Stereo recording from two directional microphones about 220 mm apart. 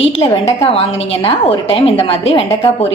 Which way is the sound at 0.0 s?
25° left (ahead or behind).